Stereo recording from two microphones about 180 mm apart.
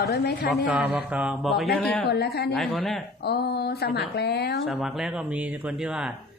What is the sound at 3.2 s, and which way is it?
A woman's voice, 65° left (ahead or behind).